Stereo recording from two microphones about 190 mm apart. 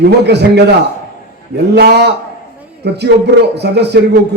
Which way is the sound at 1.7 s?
60° right (ahead or behind).